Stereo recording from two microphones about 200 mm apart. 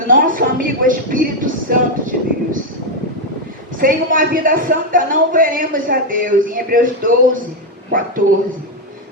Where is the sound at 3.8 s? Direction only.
45° right (ahead or behind).